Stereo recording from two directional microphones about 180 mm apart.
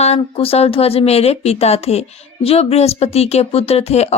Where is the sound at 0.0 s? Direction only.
35° left (ahead or behind).